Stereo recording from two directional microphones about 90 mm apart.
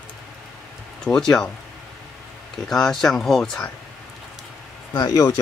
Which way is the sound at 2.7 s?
5° left (ahead or behind).